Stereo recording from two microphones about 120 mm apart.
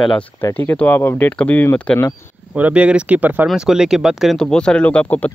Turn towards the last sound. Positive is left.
turn(degrees=15)  # may be behind; listen again after turning